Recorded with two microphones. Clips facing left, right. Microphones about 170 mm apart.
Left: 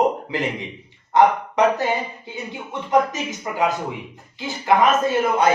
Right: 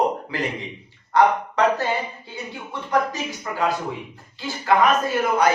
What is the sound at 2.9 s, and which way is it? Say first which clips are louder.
A man's voice: left 3 dB; 20° left (ahead or behind).